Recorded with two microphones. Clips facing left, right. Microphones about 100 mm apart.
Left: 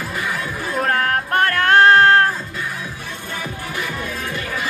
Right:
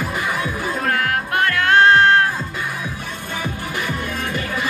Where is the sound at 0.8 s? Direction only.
35° left (ahead or behind).